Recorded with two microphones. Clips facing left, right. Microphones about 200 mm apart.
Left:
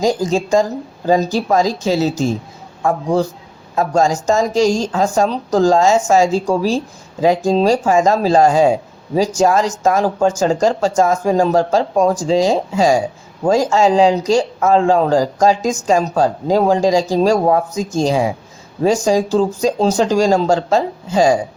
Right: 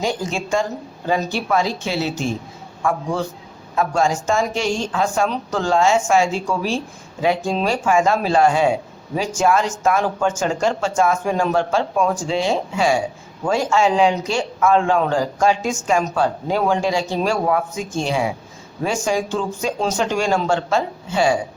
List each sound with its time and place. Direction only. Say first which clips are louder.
0.0 s speech: left 7 dB; 40° left (ahead or behind)